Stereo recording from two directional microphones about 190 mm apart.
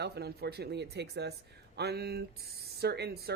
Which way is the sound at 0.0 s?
55° right (ahead or behind).